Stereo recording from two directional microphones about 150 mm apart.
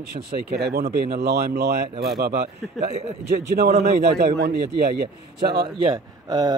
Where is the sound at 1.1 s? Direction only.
90° right.